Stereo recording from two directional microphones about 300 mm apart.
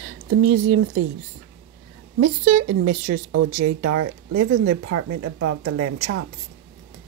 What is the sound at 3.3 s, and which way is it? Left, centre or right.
Speech, right.